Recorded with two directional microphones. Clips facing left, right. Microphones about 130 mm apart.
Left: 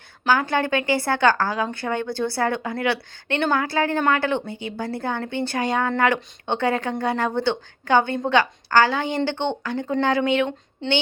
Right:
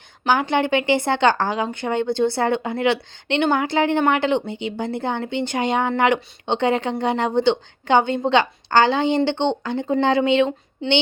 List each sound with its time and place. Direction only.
0.3 s speech: 20° right (ahead or behind)